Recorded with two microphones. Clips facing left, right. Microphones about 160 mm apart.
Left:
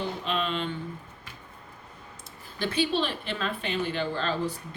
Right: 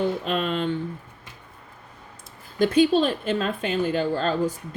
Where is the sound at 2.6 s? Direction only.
45° right (ahead or behind).